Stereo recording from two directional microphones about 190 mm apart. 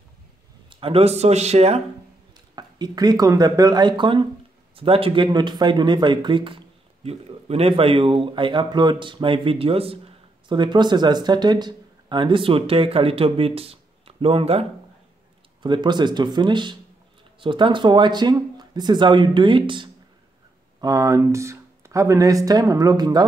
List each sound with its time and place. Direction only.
0.7 s speech: 30° right (ahead or behind)
2.5 s speech: 20° right (ahead or behind)